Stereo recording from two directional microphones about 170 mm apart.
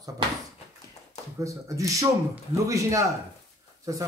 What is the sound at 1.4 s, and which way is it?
Speech, 20° right (ahead or behind).